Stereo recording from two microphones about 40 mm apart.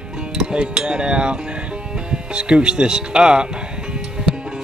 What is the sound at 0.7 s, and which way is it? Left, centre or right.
Speech, right.